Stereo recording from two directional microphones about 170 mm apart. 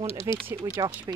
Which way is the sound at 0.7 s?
25° right (ahead or behind).